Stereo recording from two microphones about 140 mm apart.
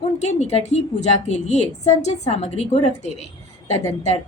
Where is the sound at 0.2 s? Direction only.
55° left (ahead or behind).